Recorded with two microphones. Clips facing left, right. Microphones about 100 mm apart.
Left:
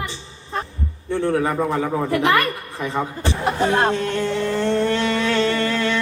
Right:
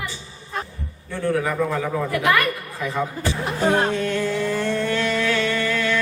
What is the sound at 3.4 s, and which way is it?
Speech, 60° left (ahead or behind).